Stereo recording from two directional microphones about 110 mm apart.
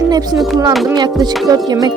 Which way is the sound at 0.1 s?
35° right (ahead or behind).